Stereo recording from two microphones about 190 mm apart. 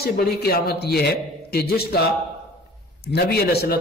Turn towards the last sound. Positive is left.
turn(degrees=55)  # may be behind; listen again after turning